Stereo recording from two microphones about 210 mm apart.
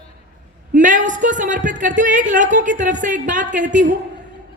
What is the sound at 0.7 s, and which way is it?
Speech, 35° right (ahead or behind).